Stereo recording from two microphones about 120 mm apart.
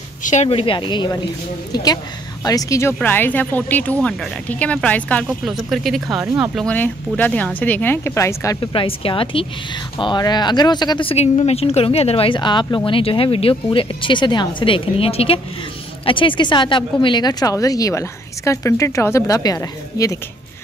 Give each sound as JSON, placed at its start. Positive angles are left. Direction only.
{"t": 0.2, "sound": "a woman's voice", "side_deg": 90}
{"t": 0.5, "sound": "speech", "side_deg": 50}
{"t": 2.4, "sound": "speech", "side_deg": 30}
{"t": 3.0, "sound": "speech", "side_deg": 15}
{"t": 5.4, "sound": "speech", "side_deg": 0}
{"t": 6.1, "sound": "speech", "side_deg": -20}
{"t": 6.7, "sound": "speech", "side_deg": 15}
{"t": 8.5, "sound": "speech", "side_deg": 50}
{"t": 11.1, "sound": "speech", "side_deg": 60}